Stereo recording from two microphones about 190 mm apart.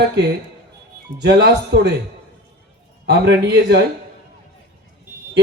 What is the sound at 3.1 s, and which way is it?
Speech, 60° right (ahead or behind).